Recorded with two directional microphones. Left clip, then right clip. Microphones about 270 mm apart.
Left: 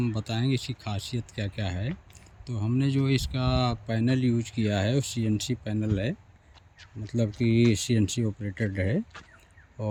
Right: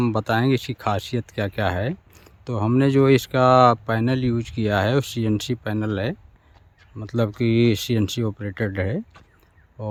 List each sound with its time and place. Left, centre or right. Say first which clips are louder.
0.0 s speech: right 11 dB; centre